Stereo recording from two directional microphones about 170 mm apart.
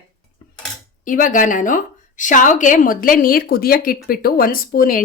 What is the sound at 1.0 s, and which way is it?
A woman's voice, 50° left (ahead or behind).